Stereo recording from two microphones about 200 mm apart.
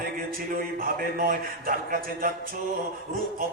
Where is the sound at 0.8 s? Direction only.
45° right (ahead or behind).